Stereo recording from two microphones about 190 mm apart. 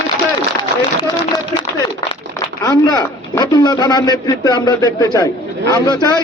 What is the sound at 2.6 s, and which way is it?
A man's voice, 20° left (ahead or behind).